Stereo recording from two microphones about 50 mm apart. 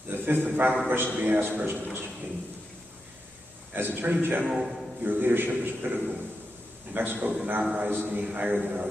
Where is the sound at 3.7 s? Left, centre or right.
Right.